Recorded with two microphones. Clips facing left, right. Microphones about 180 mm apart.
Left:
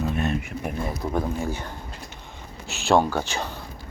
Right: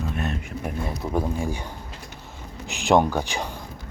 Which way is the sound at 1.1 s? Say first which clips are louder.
Right 2 dB; 10° right (ahead or behind).